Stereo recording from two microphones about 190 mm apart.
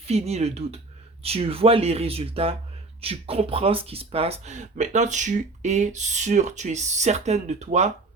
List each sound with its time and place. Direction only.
0.1 s speech: 35° right (ahead or behind)